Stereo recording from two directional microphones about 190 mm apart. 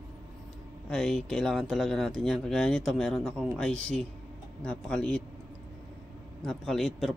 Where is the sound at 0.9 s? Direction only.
Centre (ahead or behind).